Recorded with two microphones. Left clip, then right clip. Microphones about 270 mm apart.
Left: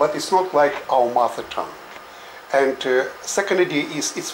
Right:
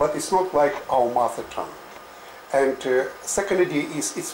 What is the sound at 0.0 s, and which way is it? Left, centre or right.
Speech, centre.